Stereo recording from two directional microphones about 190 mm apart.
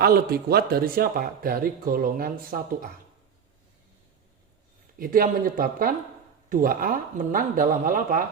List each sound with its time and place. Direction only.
0.0 s speech: 55° right (ahead or behind)
4.9 s speech: 45° right (ahead or behind)